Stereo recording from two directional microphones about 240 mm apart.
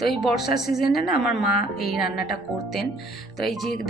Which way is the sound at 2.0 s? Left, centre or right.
Left.